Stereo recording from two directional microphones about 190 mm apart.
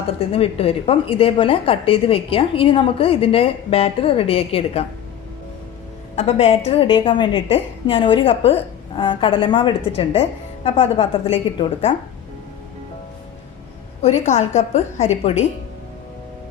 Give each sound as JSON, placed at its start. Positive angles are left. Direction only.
{"t": 0.2, "sound": "a woman's voice", "side_deg": 30}
{"t": 6.1, "sound": "a woman's voice", "side_deg": 30}
{"t": 14.0, "sound": "a woman's voice", "side_deg": 35}